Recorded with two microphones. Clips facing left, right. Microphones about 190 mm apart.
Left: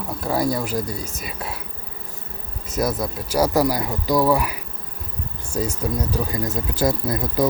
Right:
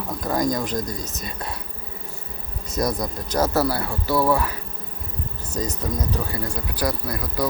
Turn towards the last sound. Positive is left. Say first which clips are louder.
# left 5 dB
turn(degrees=25)  # may be behind; listen again after turning